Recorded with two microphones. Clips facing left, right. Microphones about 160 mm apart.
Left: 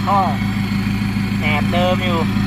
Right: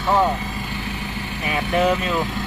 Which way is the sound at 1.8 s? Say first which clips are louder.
Left 3 dB; 25° left (ahead or behind).